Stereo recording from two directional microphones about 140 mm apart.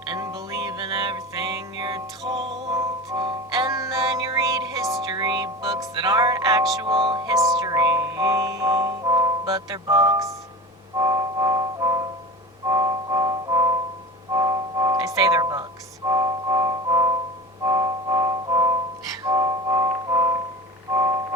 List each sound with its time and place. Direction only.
0.0 s music: 30° right (ahead or behind)
7.3 s music: 25° right (ahead or behind)
16.0 s keyboard: 25° right (ahead or behind)
17.7 s music: 25° right (ahead or behind)